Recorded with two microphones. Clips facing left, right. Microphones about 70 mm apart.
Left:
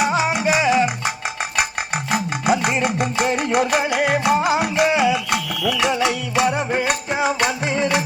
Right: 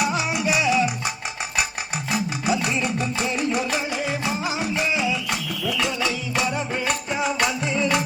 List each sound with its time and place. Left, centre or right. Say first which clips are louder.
0.0 s music: left 5 dB; left
2.0 s a sound: left 4 dB; left
7.4 s music: left 3 dB; left